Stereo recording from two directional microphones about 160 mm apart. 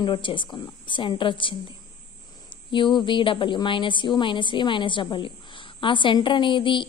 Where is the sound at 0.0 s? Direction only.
30° left (ahead or behind).